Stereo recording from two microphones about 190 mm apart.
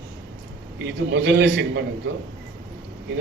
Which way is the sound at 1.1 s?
70° right (ahead or behind).